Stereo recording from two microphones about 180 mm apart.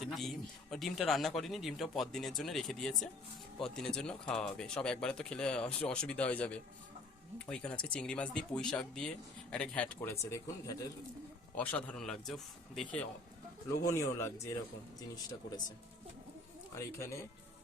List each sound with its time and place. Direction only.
0.0 s speech: centre (ahead or behind)
13.8 s speech: 15° left (ahead or behind)
16.7 s speech: 15° left (ahead or behind)